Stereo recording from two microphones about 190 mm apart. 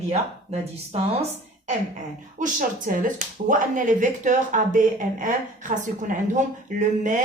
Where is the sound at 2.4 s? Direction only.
45° right (ahead or behind).